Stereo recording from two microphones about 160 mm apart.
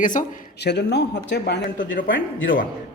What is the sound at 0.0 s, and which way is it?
Speech, 55° left (ahead or behind).